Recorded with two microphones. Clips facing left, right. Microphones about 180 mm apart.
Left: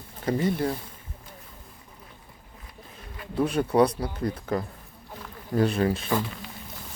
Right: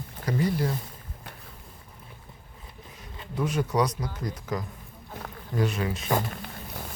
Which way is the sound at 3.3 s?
30° left (ahead or behind).